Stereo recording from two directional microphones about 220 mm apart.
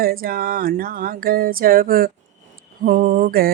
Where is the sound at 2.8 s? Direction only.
40° right (ahead or behind).